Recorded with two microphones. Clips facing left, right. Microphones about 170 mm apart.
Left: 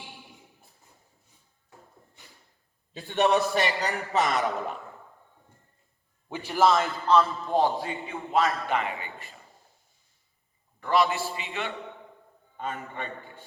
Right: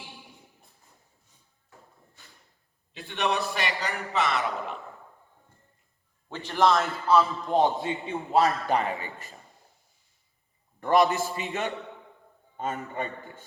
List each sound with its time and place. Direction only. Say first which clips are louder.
2.9 s a man's voice: left 5 dB; 35° left (ahead or behind)
6.2 s a man's voice: left 1 dB; 10° left (ahead or behind)
7.4 s a man's voice: right 1 dB; 20° right (ahead or behind); by 9.3 s 40° right (ahead or behind)
10.8 s a man's voice: right 3 dB; 45° right (ahead or behind)